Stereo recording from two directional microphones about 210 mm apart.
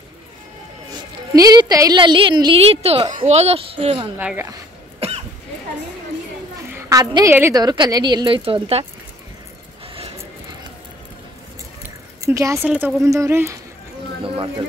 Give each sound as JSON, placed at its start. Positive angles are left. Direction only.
{"t": 1.3, "sound": "a woman's voice", "side_deg": -20}
{"t": 4.2, "sound": "a woman's voice", "side_deg": -5}
{"t": 5.0, "sound": "cough", "side_deg": -30}
{"t": 6.7, "sound": "a woman's voice", "side_deg": -15}
{"t": 12.2, "sound": "a woman's voice", "side_deg": -15}
{"t": 14.2, "sound": "a woman's voice", "side_deg": -25}